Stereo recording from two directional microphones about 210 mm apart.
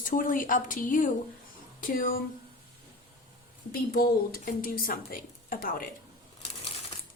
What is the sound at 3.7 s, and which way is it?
A woman's voice, 45° left (ahead or behind).